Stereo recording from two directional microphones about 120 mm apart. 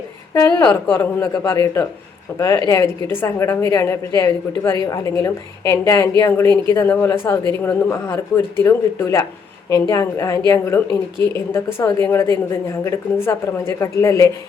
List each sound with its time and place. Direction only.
0.3 s a woman's voice: 25° left (ahead or behind)